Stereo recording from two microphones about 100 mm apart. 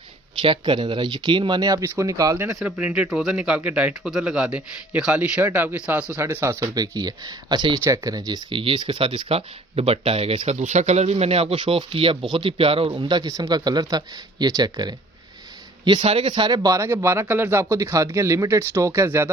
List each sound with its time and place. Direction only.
0.4 s speech: 55° right (ahead or behind); by 2.3 s 35° right (ahead or behind)
2.3 s a man's voice: 25° right (ahead or behind)
2.6 s a man's voice: 10° right (ahead or behind); by 12.9 s 65° right (ahead or behind)
12.9 s speech: 50° right (ahead or behind)
16.0 s speech: 70° right (ahead or behind)
16.3 s speech: 50° right (ahead or behind)
16.7 s a man's voice: 30° right (ahead or behind)